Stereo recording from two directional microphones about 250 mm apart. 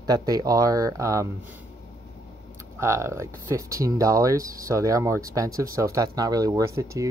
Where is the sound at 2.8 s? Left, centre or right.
Centre.